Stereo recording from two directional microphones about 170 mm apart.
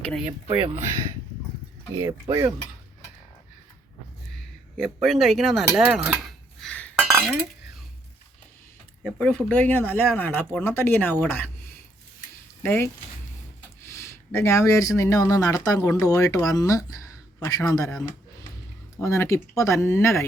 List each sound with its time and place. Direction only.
0.0 s speech: 5° left (ahead or behind)
2.0 s speech: 25° right (ahead or behind)
4.8 s speech: centre (ahead or behind)
5.7 s cutlery: 10° right (ahead or behind)
6.6 s cutlery: 5° left (ahead or behind)
9.0 s speech: 5° left (ahead or behind)
12.6 s speech: 10° left (ahead or behind)